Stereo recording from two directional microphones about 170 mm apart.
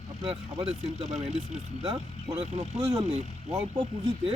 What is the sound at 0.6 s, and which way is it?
Speech, centre (ahead or behind).